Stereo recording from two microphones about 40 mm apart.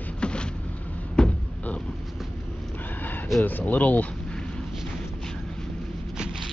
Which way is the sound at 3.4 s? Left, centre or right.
Left.